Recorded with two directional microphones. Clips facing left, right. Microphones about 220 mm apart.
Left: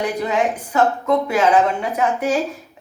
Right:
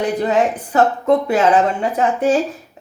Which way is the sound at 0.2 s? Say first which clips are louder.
Right 3 dB; 35° right (ahead or behind).